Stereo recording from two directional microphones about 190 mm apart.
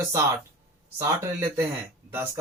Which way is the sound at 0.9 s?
15° right (ahead or behind).